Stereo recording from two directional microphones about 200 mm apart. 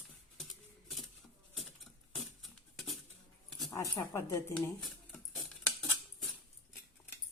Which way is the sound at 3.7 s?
15° left (ahead or behind).